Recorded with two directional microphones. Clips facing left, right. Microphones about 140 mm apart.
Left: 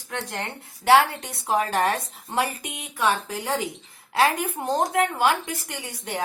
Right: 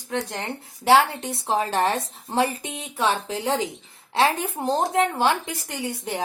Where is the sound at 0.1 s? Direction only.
20° right (ahead or behind).